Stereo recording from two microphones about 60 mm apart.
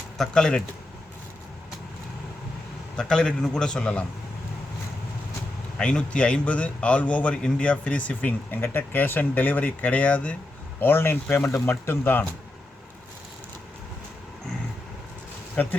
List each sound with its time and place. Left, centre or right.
0.2 s a man's voice: centre
3.0 s a man's voice: centre
5.8 s a man's voice: centre
10.8 s speech: left
15.6 s a man's voice: centre